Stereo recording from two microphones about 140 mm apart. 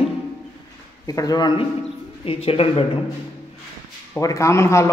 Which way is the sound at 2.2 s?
40° left (ahead or behind).